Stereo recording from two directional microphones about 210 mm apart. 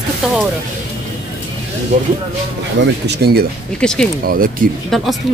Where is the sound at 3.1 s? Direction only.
50° right (ahead or behind).